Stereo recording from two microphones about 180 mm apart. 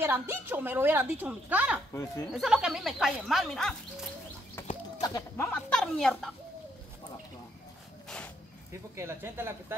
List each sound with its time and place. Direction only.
0.0 s a woman's voice: 10° right (ahead or behind)
4.6 s a sound: 10° left (ahead or behind)
5.0 s speech: 20° left (ahead or behind)
5.5 s speech: 5° left (ahead or behind)
8.9 s a woman's voice: 15° right (ahead or behind)